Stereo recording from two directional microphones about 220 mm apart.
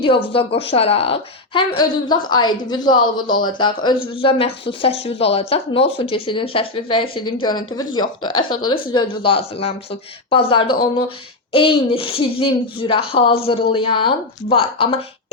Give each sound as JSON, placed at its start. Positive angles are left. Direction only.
{"t": 0.3, "sound": "speech", "side_deg": 25}